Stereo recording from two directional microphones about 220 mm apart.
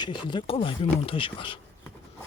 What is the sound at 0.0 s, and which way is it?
Speech, 20° left (ahead or behind).